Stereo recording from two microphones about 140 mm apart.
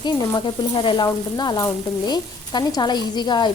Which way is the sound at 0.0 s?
30° left (ahead or behind).